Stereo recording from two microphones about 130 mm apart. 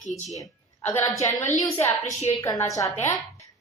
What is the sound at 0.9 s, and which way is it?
Speech, 25° left (ahead or behind).